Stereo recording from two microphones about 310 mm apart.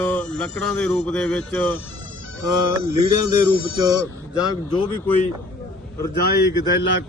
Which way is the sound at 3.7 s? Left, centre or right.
Centre.